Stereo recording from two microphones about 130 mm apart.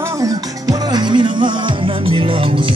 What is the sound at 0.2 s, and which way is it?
Music, 25° right (ahead or behind).